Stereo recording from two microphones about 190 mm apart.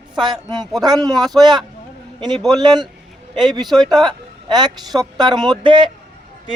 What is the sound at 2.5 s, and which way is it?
Speech, 20° right (ahead or behind).